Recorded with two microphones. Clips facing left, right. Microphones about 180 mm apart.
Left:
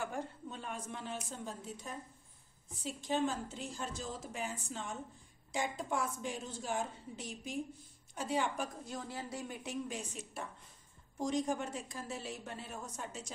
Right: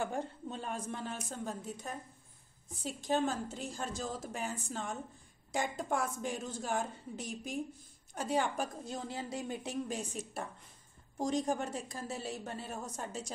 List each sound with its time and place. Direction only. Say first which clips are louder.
0.0 s a sound: right 3 dB; 30° right (ahead or behind); by 1.9 s 45° right (ahead or behind)
2.8 s a woman's voice: right 2 dB; 40° right (ahead or behind)
8.8 s a woman's voice: right 3 dB; 25° right (ahead or behind)